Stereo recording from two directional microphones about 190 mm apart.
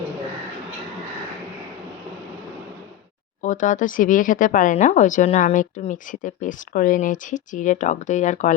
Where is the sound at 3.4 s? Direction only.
40° left (ahead or behind).